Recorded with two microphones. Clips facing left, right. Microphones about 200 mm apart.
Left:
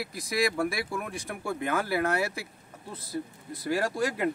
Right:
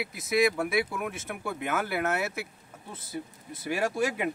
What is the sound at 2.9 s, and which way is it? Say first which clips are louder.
Speech: left 3 dB; 25° right (ahead or behind).